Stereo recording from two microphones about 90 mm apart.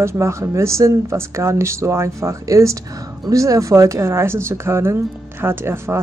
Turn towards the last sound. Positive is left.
turn(degrees=-25)  # may be behind; listen again after turning